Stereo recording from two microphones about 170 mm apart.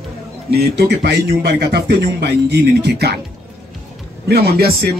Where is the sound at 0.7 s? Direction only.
75° right (ahead or behind).